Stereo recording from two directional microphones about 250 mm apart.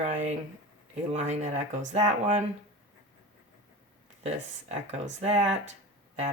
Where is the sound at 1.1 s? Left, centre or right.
Right.